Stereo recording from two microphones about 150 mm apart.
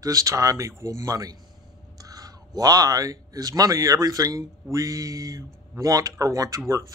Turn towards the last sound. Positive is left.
turn(degrees=-20)  # may be behind; listen again after turning